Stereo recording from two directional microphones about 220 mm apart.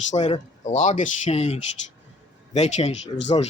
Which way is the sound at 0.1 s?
30° left (ahead or behind).